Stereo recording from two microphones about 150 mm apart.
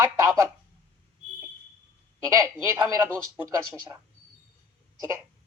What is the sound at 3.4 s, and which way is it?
Speech, 20° right (ahead or behind).